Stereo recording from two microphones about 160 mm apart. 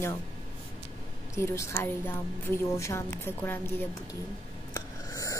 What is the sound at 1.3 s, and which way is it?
A woman's voice, 20° left (ahead or behind).